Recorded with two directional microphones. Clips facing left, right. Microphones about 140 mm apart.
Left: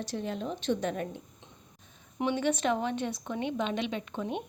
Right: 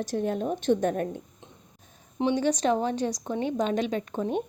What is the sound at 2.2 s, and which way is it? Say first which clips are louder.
Speech: right 4 dB; 35° right (ahead or behind).